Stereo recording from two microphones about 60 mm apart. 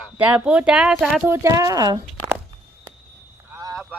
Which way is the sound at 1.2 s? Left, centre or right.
Right.